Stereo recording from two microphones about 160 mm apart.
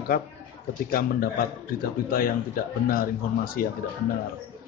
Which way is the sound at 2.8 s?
65° left (ahead or behind).